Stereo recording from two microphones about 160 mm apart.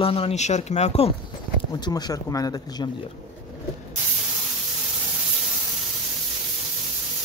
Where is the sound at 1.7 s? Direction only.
25° left (ahead or behind).